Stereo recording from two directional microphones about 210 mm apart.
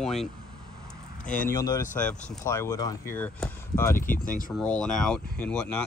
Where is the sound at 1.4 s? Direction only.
15° left (ahead or behind).